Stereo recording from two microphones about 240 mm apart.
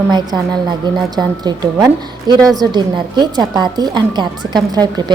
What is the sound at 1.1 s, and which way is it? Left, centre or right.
Speech, centre.